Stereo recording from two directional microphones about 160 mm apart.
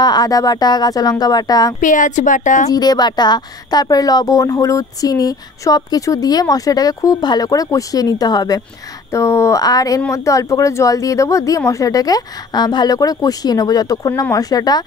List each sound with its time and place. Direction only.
0.0 s a woman's voice: 25° left (ahead or behind)
1.8 s a woman's voice: 55° left (ahead or behind)
2.7 s a woman's voice: 25° left (ahead or behind)